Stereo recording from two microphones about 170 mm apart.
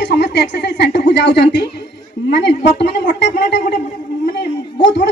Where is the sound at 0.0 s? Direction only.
80° left.